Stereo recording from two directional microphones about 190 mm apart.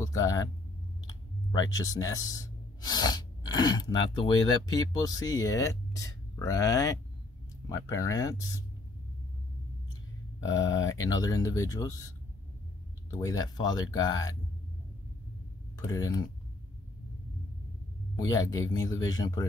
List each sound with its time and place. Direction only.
0.0 s speech: 20° left (ahead or behind)
10.4 s speech: 20° left (ahead or behind)
13.1 s speech: 20° left (ahead or behind)
15.9 s speech: 20° left (ahead or behind)
18.1 s speech: 20° left (ahead or behind)